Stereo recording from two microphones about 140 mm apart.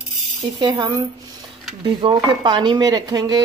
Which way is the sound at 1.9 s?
35° right (ahead or behind).